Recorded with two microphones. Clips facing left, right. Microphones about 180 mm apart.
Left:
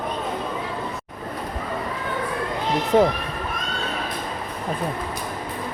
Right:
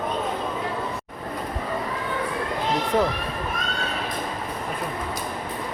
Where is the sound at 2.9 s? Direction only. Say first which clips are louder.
Left 6 dB; 25° left (ahead or behind).